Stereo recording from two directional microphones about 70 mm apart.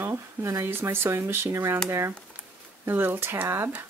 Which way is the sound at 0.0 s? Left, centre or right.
Right.